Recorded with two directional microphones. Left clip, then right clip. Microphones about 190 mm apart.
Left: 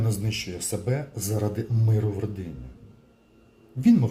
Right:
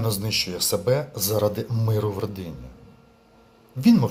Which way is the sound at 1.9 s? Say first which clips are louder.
Right 5 dB; 45° right (ahead or behind).